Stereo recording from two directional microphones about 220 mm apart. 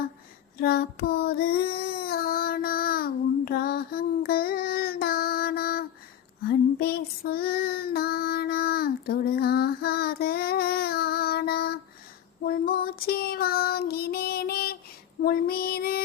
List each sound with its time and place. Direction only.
0.6 s child singing: 45° left (ahead or behind)
15.2 s female singing: 40° left (ahead or behind)